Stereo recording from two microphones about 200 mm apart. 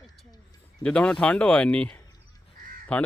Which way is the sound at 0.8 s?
5° left (ahead or behind).